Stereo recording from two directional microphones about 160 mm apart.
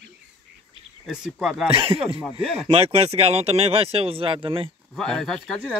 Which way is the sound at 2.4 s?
Centre (ahead or behind).